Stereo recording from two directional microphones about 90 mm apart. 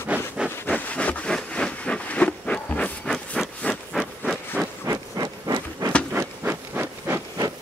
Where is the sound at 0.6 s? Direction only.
15° left (ahead or behind).